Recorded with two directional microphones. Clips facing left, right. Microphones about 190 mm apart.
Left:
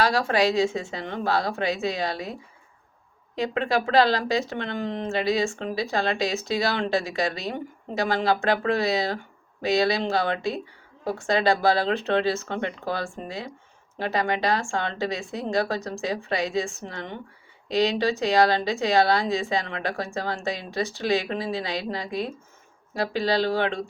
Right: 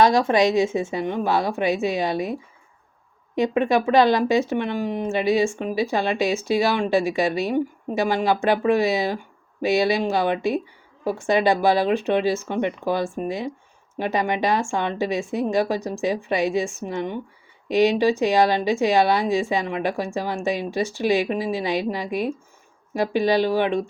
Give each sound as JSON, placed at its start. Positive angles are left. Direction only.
{"t": 0.1, "sound": "speech", "side_deg": -20}
{"t": 3.3, "sound": "speech", "side_deg": -15}